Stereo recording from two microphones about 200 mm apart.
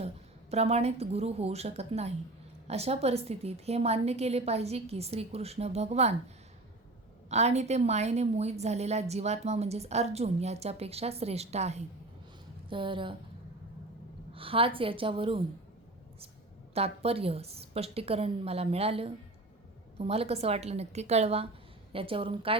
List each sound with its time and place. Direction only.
0.5 s a woman's voice: 30° right (ahead or behind)
7.3 s a woman's voice: 35° right (ahead or behind)
14.3 s a woman's voice: 25° right (ahead or behind)
16.7 s a woman's voice: 30° right (ahead or behind)